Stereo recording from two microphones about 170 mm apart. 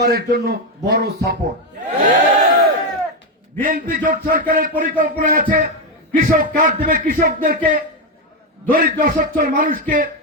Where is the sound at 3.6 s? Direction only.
50° right (ahead or behind).